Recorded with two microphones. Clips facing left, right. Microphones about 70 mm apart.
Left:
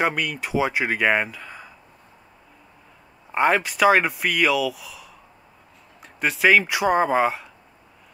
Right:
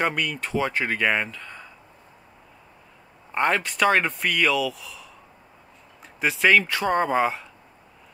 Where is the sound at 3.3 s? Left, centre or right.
Centre.